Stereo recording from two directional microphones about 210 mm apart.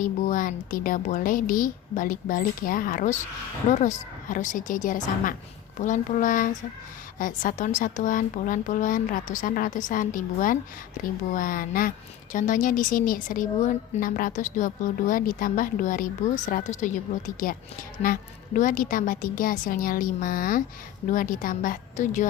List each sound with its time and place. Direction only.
0.0 s a woman's voice: 40° left (ahead or behind)